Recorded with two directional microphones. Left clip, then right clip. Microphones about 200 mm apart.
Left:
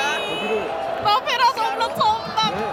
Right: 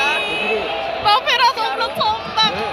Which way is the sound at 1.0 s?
5° left (ahead or behind).